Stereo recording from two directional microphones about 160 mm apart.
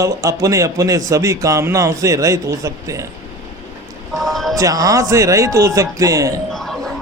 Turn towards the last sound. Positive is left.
turn(degrees=0)  # may be behind; listen again after turning